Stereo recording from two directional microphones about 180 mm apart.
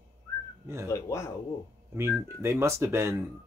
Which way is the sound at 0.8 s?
15° left (ahead or behind).